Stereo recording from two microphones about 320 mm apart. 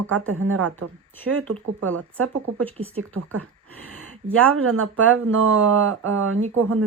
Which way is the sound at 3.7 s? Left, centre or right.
Right.